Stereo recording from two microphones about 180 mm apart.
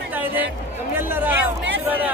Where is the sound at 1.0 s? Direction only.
10° right (ahead or behind).